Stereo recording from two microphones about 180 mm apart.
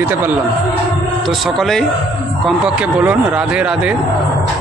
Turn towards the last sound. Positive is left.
turn(degrees=-5)  # may be behind; listen again after turning